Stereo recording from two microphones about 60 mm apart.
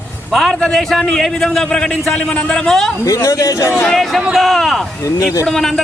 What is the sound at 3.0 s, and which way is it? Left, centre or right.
Speech, left.